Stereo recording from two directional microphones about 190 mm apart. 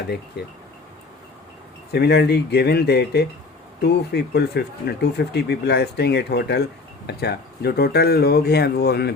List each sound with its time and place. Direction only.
0.4 s speech: 60° left (ahead or behind)
1.9 s speech: 60° left (ahead or behind)